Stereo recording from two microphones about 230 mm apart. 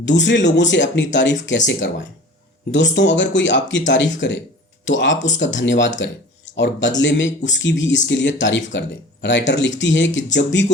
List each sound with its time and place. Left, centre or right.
0.0 s speech: left